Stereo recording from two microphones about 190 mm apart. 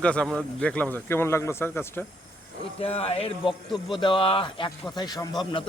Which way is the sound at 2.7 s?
30° left (ahead or behind).